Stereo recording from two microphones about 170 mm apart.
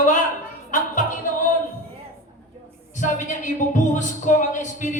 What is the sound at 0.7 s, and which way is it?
Music, 50° left (ahead or behind).